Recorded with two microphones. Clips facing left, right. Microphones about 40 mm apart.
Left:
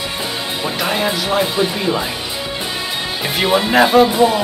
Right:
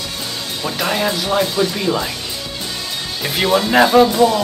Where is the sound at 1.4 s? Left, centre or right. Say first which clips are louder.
Even; centre.